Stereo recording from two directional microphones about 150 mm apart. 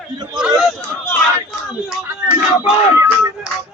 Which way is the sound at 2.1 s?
15° right (ahead or behind).